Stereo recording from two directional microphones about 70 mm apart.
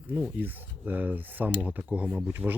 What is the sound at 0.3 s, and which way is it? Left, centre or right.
Speech, right.